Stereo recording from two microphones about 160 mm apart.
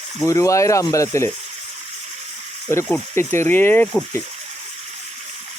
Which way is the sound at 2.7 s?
15° left (ahead or behind).